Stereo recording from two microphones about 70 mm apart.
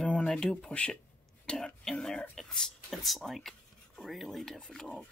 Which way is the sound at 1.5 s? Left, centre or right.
Centre.